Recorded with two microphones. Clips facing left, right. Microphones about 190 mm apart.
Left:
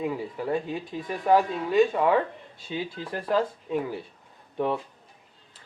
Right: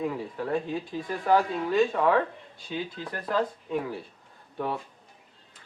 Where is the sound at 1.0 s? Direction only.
20° left (ahead or behind).